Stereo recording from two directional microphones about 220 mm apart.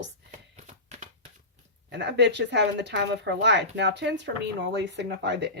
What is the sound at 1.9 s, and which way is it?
Speech, 50° right (ahead or behind).